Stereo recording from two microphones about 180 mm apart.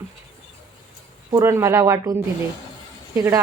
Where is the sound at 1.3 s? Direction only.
15° right (ahead or behind).